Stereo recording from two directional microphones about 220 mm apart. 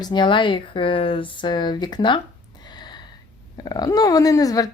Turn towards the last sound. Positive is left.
turn(degrees=15)  # may be behind; listen again after turning